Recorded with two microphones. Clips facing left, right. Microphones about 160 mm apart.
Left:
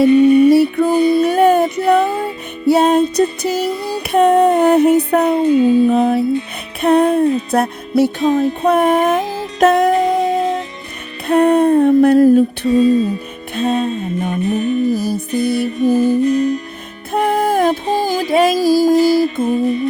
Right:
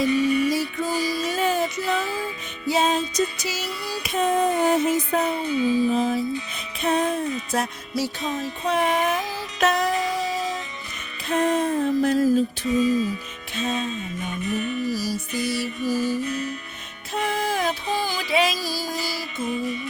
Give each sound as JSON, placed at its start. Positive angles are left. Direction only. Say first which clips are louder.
{"t": 0.0, "sound": "child singing", "louder": "left 12 dB", "side_deg": 55}
{"t": 6.8, "sound": "music", "louder": "left 11 dB", "side_deg": 60}
{"t": 11.3, "sound": "a sound", "louder": "left 10 dB", "side_deg": 60}
{"t": 13.6, "sound": "music", "louder": "left 10 dB", "side_deg": 60}